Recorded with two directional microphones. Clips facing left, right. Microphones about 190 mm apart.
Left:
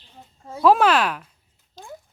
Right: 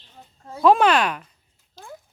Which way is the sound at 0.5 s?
5° left (ahead or behind).